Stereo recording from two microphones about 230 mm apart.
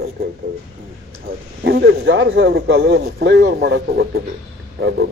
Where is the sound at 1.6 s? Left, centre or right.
Right.